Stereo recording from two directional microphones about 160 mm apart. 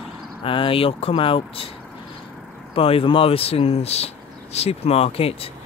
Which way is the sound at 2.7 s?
35° left (ahead or behind).